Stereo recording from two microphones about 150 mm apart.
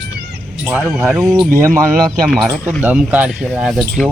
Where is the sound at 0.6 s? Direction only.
10° right (ahead or behind).